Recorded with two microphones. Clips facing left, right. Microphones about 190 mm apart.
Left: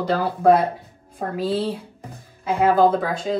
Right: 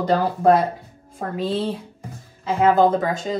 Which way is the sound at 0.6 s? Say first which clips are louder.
Left 1 dB; 55° left (ahead or behind).